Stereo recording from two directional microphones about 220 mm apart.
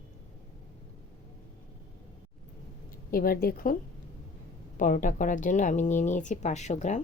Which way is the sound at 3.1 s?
40° left (ahead or behind).